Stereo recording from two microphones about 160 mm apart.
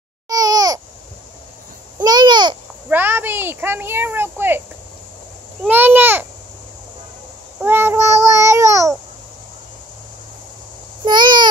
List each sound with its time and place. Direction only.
0.3 s babbling: 25° right (ahead or behind)
2.0 s babbling: 25° right (ahead or behind)
2.9 s a child's voice: 15° right (ahead or behind)
5.7 s a child's voice: 10° right (ahead or behind)
7.6 s babbling: 15° right (ahead or behind)
11.1 s babbling: 30° right (ahead or behind)